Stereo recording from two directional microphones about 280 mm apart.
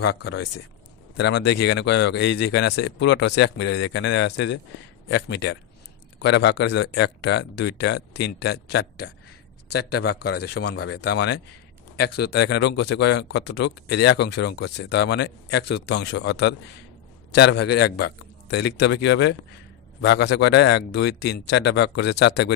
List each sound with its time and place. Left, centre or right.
0.0 s speech: left